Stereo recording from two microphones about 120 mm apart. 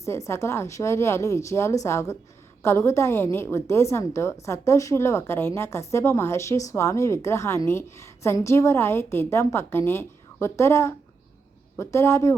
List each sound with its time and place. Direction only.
0.0 s a woman's voice: 25° left (ahead or behind)